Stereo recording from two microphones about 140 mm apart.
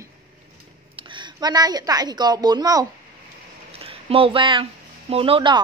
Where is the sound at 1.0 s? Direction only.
35° right (ahead or behind).